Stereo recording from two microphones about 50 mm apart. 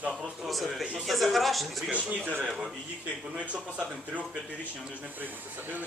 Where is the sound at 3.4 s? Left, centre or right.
Right.